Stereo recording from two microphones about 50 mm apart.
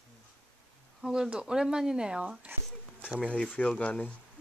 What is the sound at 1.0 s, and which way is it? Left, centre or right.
Speech, centre.